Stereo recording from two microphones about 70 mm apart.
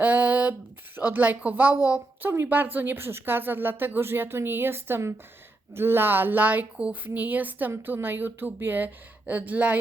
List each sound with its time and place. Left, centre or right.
0.0 s a sound: right
0.9 s a woman's voice: right
7.7 s a woman's voice: right